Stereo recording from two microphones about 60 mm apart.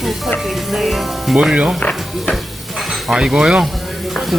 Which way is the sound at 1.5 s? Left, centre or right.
Centre.